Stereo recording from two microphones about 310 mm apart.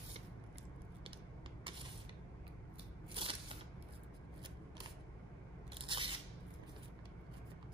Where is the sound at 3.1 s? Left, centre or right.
Centre.